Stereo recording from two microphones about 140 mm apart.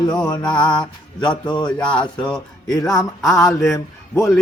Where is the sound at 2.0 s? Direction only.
5° left (ahead or behind).